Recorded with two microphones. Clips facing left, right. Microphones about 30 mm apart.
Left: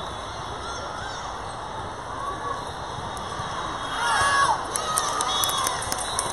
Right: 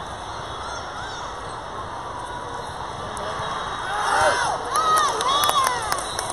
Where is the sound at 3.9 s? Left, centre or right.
Centre.